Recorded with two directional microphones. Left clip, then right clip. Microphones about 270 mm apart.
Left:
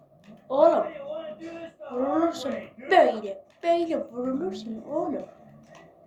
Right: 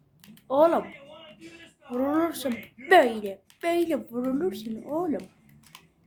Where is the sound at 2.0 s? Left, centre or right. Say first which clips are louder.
Left 1 dB; right.